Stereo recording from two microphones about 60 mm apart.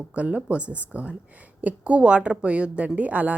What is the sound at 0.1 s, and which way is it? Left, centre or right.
Speech, right.